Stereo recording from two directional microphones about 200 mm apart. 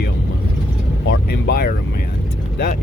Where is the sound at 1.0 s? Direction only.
65° left (ahead or behind).